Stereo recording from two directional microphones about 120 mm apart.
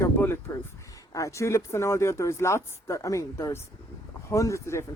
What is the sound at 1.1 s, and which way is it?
Speech, 25° left (ahead or behind).